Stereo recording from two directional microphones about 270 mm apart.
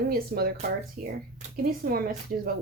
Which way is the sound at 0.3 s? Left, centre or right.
Right.